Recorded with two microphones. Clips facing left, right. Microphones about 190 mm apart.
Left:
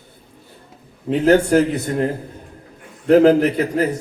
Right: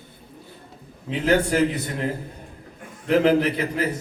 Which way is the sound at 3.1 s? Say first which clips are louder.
Left 6 dB; 45° left (ahead or behind).